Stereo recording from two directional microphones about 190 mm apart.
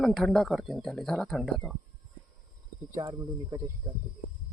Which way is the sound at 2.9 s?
20° right (ahead or behind).